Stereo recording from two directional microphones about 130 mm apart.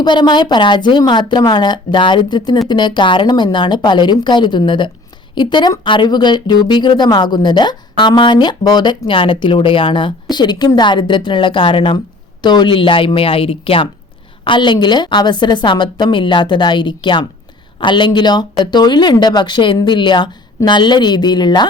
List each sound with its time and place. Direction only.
0.0 s a woman's voice: 35° left (ahead or behind)